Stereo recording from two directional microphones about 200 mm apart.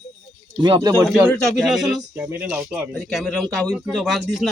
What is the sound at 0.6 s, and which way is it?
Speech, 25° right (ahead or behind).